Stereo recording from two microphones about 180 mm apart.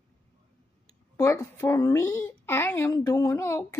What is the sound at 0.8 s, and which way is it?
A child's voice, 15° left (ahead or behind).